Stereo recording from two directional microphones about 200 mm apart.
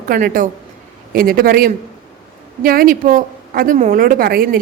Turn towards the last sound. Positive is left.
turn(degrees=-45)  # may be behind; listen again after turning